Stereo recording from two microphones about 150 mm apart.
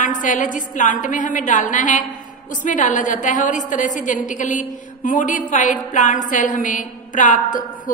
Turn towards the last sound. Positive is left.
turn(degrees=60)  # may be behind; listen again after turning